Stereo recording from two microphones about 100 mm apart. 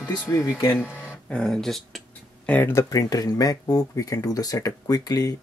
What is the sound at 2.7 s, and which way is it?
Speech, 35° left (ahead or behind).